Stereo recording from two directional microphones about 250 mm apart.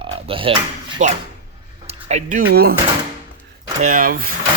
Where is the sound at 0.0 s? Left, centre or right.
Right.